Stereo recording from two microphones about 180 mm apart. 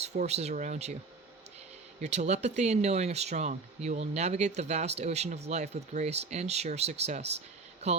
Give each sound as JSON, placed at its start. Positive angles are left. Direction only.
{"t": 0.0, "sound": "speech", "side_deg": -35}
{"t": 2.0, "sound": "speech", "side_deg": -40}